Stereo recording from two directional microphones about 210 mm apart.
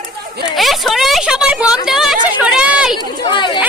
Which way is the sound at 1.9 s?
Centre (ahead or behind).